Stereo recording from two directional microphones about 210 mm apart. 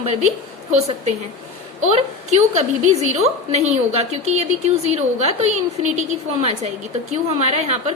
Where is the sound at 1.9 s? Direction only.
30° right (ahead or behind).